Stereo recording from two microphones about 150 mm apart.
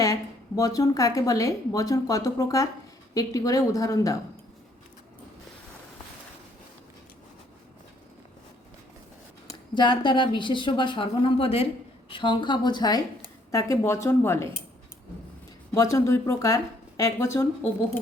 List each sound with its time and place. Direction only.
0.0 s a woman's voice: 25° left (ahead or behind)
9.5 s a woman's voice: 30° left (ahead or behind)
15.7 s a woman's voice: 20° left (ahead or behind)